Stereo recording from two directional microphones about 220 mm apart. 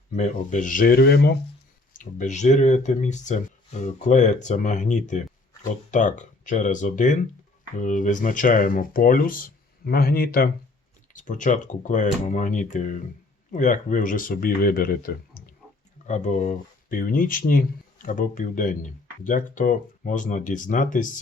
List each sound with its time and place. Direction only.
0.1 s speech: 35° left (ahead or behind)
1.9 s speech: 35° left (ahead or behind)